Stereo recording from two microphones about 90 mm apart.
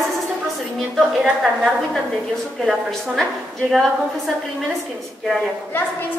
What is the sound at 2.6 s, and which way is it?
A woman's voice, centre (ahead or behind).